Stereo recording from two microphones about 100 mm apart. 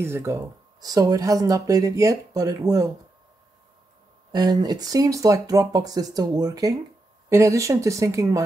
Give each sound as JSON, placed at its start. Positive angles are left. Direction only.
{"t": 0.0, "sound": "speech", "side_deg": -25}
{"t": 0.7, "sound": "speech", "side_deg": -40}
{"t": 4.3, "sound": "speech", "side_deg": -45}
{"t": 7.2, "sound": "speech", "side_deg": -25}